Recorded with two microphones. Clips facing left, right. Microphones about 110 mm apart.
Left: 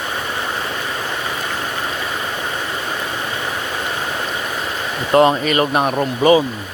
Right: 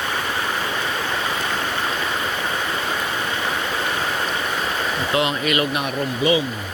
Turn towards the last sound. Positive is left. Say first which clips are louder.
# left 6 dB
turn(degrees=40)  # may be behind; listen again after turning